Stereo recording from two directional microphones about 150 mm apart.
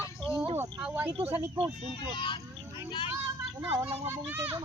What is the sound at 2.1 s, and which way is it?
Vehicle, 35° left (ahead or behind).